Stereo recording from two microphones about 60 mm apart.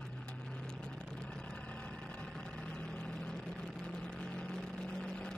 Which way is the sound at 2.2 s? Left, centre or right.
Centre.